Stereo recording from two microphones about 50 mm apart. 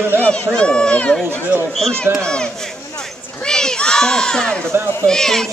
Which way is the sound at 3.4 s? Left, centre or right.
Centre.